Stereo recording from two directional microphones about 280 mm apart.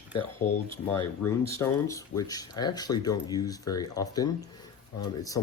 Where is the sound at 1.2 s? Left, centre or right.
Centre.